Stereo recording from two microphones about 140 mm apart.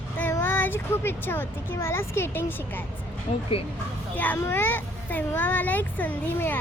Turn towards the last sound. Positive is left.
turn(degrees=15)  # may be behind; listen again after turning